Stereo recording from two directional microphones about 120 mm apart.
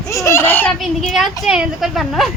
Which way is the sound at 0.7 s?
Centre (ahead or behind).